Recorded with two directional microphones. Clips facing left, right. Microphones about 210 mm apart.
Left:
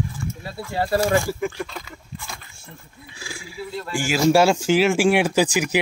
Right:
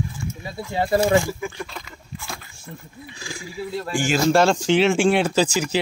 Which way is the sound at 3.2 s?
5° left (ahead or behind).